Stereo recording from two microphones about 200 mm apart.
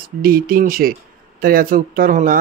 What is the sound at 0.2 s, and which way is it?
Speech, 45° right (ahead or behind).